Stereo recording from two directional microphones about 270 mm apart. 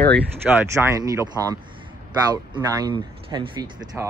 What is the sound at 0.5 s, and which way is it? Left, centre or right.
Speech, centre.